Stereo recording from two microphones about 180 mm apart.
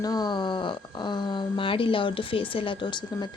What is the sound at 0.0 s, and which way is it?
Speech, 20° left (ahead or behind).